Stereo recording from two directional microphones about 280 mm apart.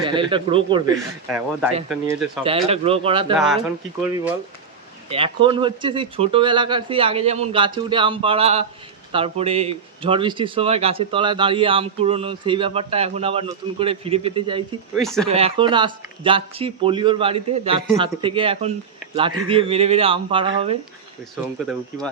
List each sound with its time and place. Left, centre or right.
0.0 s speech: centre
0.9 s speech: centre
2.4 s speech: centre
3.3 s speech: centre
5.0 s speech: centre
14.9 s speech: centre
15.3 s speech: right